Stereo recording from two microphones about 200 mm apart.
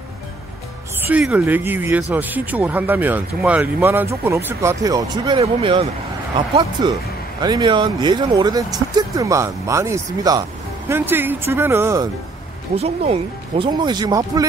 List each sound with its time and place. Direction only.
1.0 s speech: 5° right (ahead or behind)
12.7 s speech: 30° right (ahead or behind)